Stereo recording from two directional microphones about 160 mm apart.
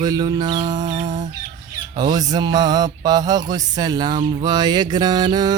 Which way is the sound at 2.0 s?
25° right (ahead or behind).